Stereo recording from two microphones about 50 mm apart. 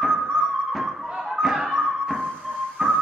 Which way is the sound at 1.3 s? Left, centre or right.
Centre.